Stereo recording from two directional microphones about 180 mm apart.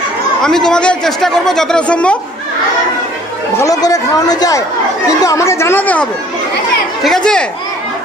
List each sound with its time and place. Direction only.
0.4 s a man's voice: 5° left (ahead or behind)
3.5 s a man's voice: 20° left (ahead or behind); by 7.4 s 5° left (ahead or behind)